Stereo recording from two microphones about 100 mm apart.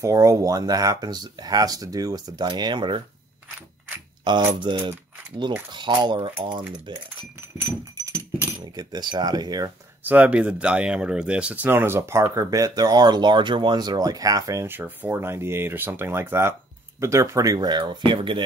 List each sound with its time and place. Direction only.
0.0 s speech: 30° right (ahead or behind); by 3.0 s 50° right (ahead or behind)
4.3 s speech: 50° right (ahead or behind)
8.0 s dog: 25° right (ahead or behind)
8.7 s speech: 45° right (ahead or behind)
10.0 s speech: 15° right (ahead or behind); by 18.4 s 55° right (ahead or behind)